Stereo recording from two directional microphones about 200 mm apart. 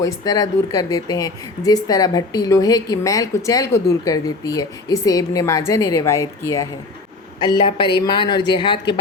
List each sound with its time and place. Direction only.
0.0 s speech: 20° left (ahead or behind)